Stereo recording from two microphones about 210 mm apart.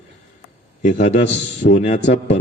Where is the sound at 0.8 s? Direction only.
35° left (ahead or behind).